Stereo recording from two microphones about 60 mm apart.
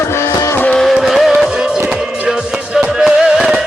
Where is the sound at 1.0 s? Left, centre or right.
Centre.